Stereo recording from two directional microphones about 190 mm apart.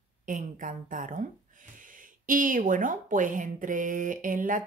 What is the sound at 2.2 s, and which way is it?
Speech, 45° right (ahead or behind).